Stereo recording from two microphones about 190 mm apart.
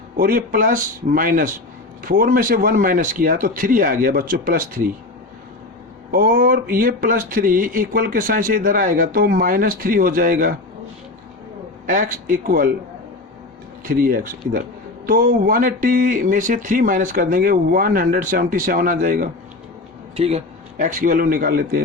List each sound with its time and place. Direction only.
0.2 s speech: 50° right (ahead or behind)
6.1 s speech: 50° right (ahead or behind)
11.9 s speech: 45° right (ahead or behind)
13.8 s speech: 50° right (ahead or behind)
20.1 s speech: 35° right (ahead or behind); by 21.8 s 50° right (ahead or behind)